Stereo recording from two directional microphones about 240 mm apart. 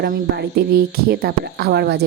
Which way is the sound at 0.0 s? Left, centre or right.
Right.